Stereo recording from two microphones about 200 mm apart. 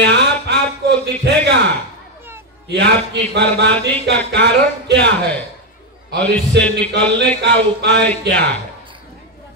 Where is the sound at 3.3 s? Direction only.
60° right (ahead or behind).